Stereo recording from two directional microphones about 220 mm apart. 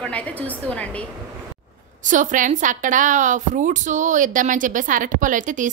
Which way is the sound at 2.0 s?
35° right (ahead or behind).